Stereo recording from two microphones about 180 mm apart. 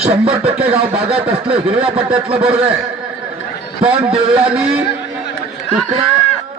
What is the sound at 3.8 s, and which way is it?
A man's voice, 5° right (ahead or behind).